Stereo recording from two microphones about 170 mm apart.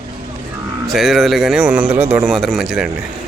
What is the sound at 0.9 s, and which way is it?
Speech, centre (ahead or behind).